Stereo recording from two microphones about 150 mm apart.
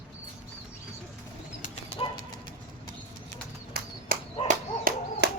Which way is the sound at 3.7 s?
90° right.